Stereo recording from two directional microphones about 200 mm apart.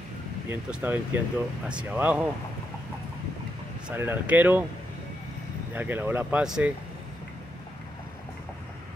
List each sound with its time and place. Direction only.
0.5 s speech: 5° right (ahead or behind)
3.9 s speech: 10° right (ahead or behind)
5.8 s speech: 10° right (ahead or behind)